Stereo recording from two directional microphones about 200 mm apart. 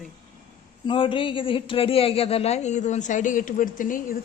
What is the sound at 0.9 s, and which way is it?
Speech, 25° left (ahead or behind).